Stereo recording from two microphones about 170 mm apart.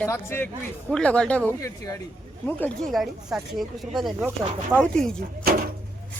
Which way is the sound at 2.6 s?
5° left (ahead or behind).